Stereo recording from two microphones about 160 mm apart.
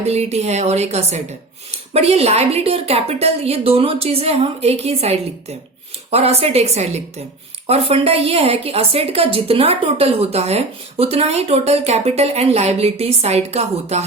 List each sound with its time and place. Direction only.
0.0 s a woman's voice: 40° right (ahead or behind)